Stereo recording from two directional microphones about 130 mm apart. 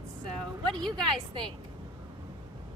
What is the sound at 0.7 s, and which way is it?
Speech, 5° left (ahead or behind).